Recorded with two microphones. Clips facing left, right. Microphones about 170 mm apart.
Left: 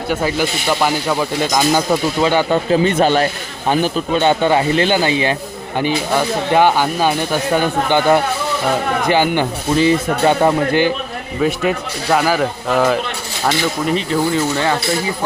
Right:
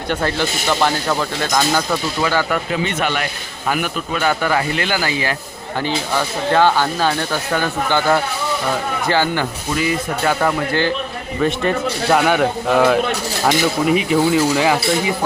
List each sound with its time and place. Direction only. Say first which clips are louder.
0.1 s speech: left 2 dB; 10° left (ahead or behind)
2.7 s speech: left 10 dB; 35° left (ahead or behind); by 10.9 s 20° left (ahead or behind)
11.3 s speech: left 1 dB; 5° left (ahead or behind)